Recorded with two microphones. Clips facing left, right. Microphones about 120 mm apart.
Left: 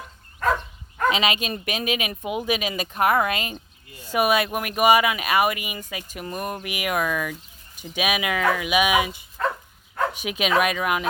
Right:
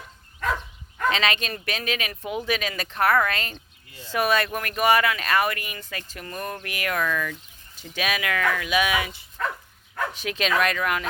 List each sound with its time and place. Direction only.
1.1 s speech: 10° left (ahead or behind)